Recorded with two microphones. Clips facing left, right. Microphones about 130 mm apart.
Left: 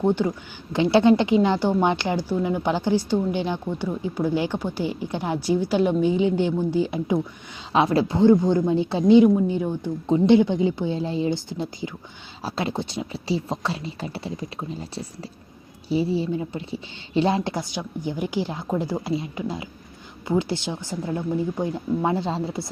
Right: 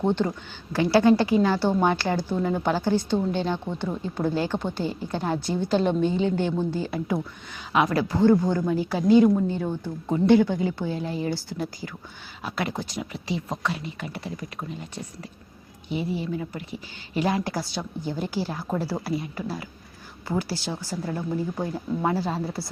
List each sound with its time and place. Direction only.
0.0 s a woman's voice: 10° left (ahead or behind)
0.7 s a woman's voice: 20° left (ahead or behind)
7.7 s a woman's voice: 30° left (ahead or behind)